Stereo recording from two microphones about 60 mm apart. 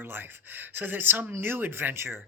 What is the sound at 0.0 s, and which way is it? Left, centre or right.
Speech, right.